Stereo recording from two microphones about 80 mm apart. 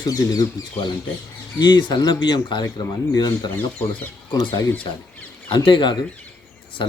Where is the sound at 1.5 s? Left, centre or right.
Left.